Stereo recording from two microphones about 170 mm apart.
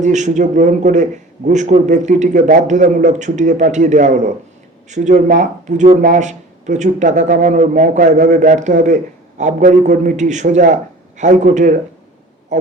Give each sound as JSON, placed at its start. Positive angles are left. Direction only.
{"t": 0.0, "sound": "a man's voice", "side_deg": -45}